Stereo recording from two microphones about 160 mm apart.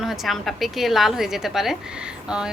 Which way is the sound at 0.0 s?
Centre (ahead or behind).